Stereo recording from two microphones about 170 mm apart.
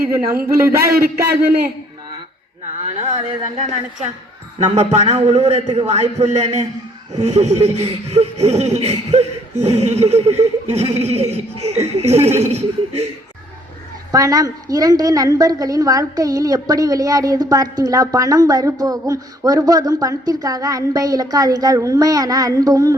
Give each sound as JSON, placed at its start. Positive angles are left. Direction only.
{"t": 0.9, "sound": "a man's voice", "side_deg": -65}
{"t": 2.8, "sound": "a sound", "side_deg": -40}
{"t": 14.1, "sound": "a woman's voice", "side_deg": -20}